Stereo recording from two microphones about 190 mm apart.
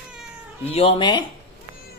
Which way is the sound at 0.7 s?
30° left (ahead or behind).